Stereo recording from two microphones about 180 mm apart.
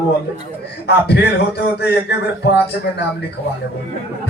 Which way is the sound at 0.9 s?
65° left (ahead or behind).